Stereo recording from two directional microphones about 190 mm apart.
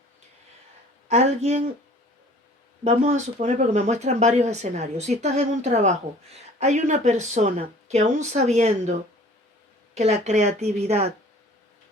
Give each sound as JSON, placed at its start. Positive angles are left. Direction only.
{"t": 2.8, "sound": "speech", "side_deg": -40}